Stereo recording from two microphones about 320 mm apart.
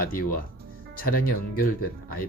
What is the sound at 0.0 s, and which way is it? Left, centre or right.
Speech, left.